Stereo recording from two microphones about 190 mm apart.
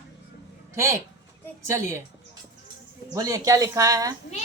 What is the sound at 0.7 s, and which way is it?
Speech, 15° right (ahead or behind).